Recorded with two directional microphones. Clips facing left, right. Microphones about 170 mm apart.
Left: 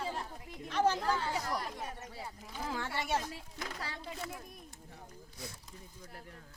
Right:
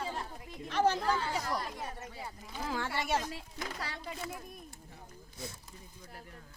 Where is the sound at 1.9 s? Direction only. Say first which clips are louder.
Right 1 dB; 90° right.